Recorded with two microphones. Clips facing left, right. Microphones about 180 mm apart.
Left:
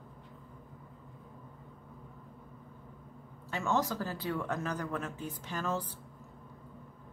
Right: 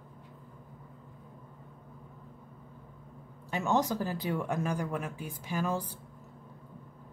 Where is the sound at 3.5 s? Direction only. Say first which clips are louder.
Right 3 dB; 15° right (ahead or behind).